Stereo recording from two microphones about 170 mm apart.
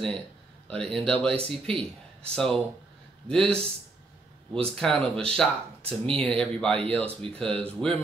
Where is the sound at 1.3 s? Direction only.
35° right (ahead or behind).